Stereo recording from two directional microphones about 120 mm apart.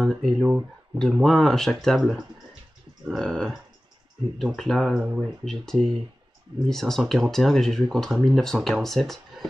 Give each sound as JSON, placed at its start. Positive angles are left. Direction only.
{"t": 0.0, "sound": "speech", "side_deg": 0}